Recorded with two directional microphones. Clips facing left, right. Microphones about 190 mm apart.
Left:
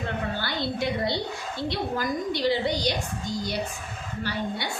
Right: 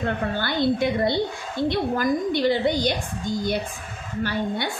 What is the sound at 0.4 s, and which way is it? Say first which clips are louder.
A woman's voice: right 7 dB; 55° right (ahead or behind).